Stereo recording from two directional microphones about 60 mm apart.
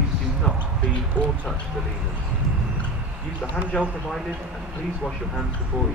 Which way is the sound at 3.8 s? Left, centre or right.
Centre.